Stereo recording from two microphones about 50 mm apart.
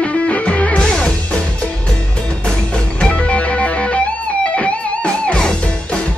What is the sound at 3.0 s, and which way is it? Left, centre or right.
Music, left.